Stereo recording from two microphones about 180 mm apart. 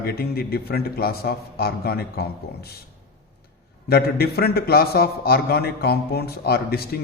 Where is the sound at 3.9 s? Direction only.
60° left (ahead or behind).